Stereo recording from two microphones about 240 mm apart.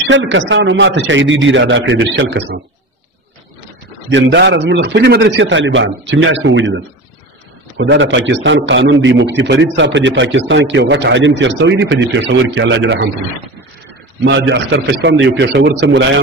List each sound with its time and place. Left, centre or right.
0.1 s a man's voice: right
4.1 s a man's voice: right
14.2 s a man's voice: right